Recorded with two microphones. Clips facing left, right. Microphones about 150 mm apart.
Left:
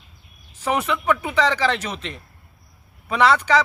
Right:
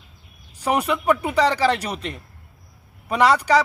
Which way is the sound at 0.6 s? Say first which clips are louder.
Right 1 dB; 10° right (ahead or behind).